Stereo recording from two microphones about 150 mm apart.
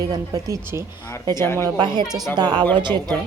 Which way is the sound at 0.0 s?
25° right (ahead or behind).